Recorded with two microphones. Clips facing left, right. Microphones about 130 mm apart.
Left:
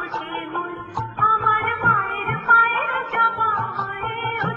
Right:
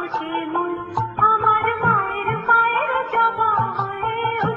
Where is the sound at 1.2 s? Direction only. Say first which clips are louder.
Right 2 dB; centre (ahead or behind).